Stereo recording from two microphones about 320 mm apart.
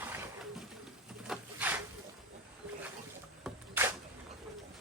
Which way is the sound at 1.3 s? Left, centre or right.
Centre.